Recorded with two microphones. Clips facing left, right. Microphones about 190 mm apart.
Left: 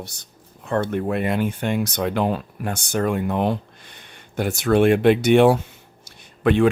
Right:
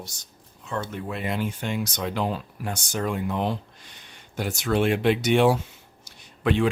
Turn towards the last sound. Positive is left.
turn(degrees=55)  # may be behind; listen again after turning